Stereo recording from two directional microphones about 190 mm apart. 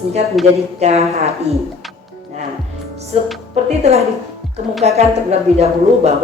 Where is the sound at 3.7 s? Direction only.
35° right (ahead or behind).